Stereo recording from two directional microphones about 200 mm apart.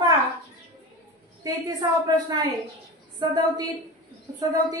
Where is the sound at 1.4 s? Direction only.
20° right (ahead or behind).